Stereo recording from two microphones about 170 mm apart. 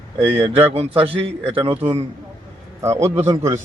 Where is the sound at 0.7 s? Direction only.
35° right (ahead or behind).